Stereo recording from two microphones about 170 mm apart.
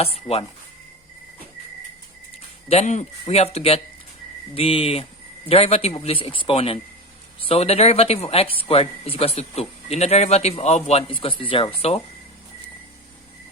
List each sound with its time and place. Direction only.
0.0 s speech: 35° left (ahead or behind)
2.6 s speech: 40° left (ahead or behind)